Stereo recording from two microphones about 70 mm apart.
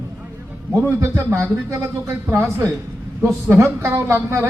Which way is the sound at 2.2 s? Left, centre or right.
Right.